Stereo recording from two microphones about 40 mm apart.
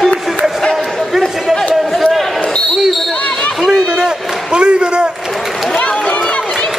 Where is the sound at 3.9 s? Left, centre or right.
Centre.